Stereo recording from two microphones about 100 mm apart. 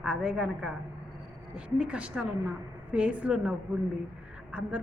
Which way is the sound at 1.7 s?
10° right (ahead or behind).